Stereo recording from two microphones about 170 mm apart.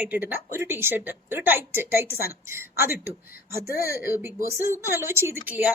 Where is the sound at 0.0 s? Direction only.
10° right (ahead or behind).